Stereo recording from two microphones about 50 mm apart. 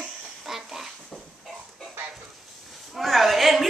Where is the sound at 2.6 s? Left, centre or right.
Centre.